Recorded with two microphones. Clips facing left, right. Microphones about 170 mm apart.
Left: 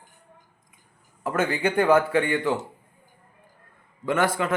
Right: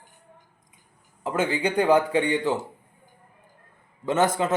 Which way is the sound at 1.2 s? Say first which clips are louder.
Even; 15° right (ahead or behind).